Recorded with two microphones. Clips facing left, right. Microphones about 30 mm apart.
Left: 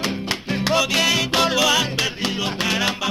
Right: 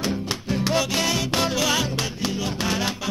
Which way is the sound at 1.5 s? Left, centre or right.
Left.